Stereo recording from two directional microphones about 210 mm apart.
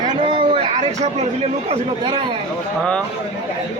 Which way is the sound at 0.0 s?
20° right (ahead or behind).